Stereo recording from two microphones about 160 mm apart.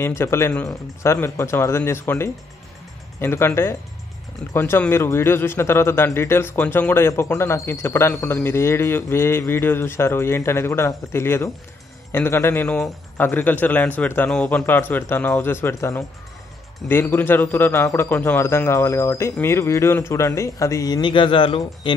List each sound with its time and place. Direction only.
0.0 s speech: 15° left (ahead or behind); by 21.9 s 30° left (ahead or behind)